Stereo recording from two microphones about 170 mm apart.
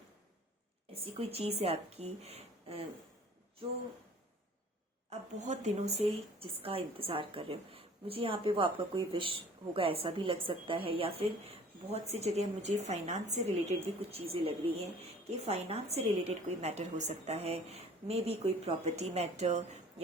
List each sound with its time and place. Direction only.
1.3 s a woman's voice: 35° right (ahead or behind)
5.4 s a woman's voice: 40° right (ahead or behind)